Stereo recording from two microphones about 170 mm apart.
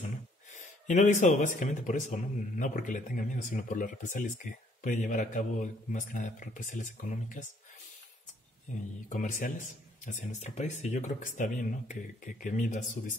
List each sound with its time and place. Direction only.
0.5 s speech: 50° left (ahead or behind)
9.1 s speech: 50° left (ahead or behind)